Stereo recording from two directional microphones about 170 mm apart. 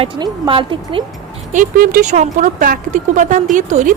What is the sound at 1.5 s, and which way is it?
Speech, 55° right (ahead or behind).